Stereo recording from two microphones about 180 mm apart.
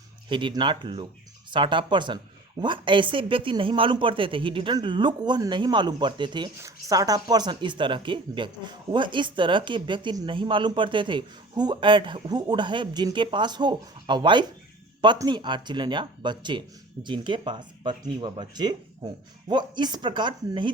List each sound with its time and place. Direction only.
0.3 s speech: 25° right (ahead or behind)